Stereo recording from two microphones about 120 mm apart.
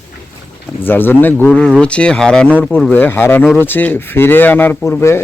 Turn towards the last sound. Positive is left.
turn(degrees=20)  # may be behind; listen again after turning